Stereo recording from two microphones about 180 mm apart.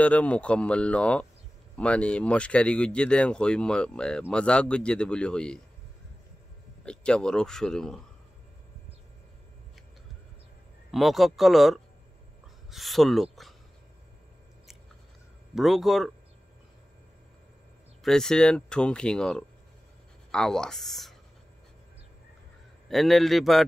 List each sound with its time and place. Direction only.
0.0 s speech: 5° left (ahead or behind)
6.8 s speech: 5° left (ahead or behind)
10.9 s speech: centre (ahead or behind)
15.5 s speech: centre (ahead or behind)
18.0 s speech: 5° left (ahead or behind)
22.8 s speech: centre (ahead or behind)